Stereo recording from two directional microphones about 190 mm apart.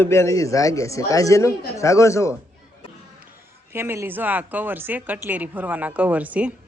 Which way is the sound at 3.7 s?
10° right (ahead or behind).